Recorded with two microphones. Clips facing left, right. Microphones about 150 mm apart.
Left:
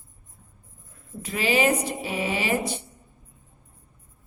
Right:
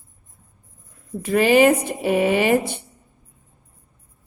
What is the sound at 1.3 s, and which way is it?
Mantra, 55° right (ahead or behind).